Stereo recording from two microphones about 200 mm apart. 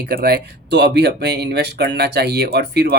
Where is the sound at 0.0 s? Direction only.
50° right (ahead or behind).